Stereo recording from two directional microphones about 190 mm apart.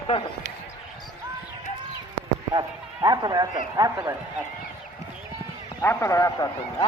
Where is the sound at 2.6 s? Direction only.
20° right (ahead or behind).